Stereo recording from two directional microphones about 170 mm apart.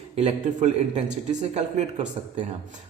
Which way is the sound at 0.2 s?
40° right (ahead or behind).